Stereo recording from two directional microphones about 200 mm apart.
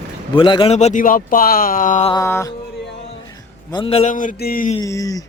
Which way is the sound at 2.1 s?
15° left (ahead or behind).